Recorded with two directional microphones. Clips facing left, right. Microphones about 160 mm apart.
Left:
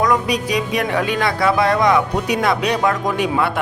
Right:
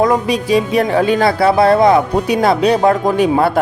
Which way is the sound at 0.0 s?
30° right (ahead or behind).